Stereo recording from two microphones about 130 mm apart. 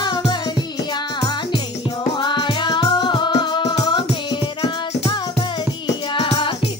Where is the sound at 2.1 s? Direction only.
35° left (ahead or behind).